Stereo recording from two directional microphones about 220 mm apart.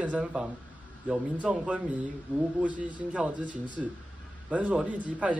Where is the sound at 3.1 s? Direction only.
5° right (ahead or behind).